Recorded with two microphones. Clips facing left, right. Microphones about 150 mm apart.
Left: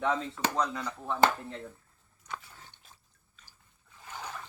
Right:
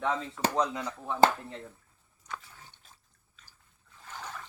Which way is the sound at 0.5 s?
15° right (ahead or behind).